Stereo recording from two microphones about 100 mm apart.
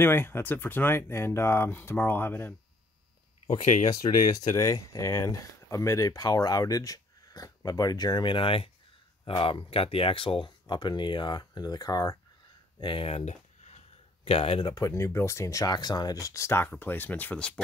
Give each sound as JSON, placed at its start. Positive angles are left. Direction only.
{"t": 0.0, "sound": "speech", "side_deg": 20}
{"t": 3.9, "sound": "speech", "side_deg": 40}
{"t": 12.8, "sound": "speech", "side_deg": 65}
{"t": 14.2, "sound": "speech", "side_deg": 70}
{"t": 14.7, "sound": "speech", "side_deg": 35}